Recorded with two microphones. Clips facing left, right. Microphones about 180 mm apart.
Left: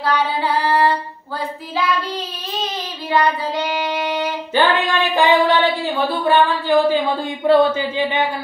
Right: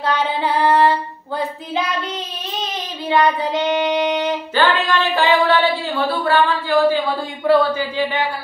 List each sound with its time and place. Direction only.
0.0 s female singing: 20° right (ahead or behind)
3.1 s child singing: 20° right (ahead or behind)
4.6 s female singing: 20° left (ahead or behind)
6.0 s speech: 20° left (ahead or behind)